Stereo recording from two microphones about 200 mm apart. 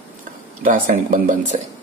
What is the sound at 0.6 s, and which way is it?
Speech, 40° right (ahead or behind).